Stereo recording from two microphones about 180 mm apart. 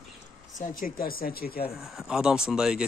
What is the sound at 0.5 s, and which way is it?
Speech, 50° left (ahead or behind).